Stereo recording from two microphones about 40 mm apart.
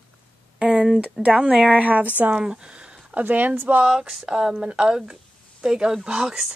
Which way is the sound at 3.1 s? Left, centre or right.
Right.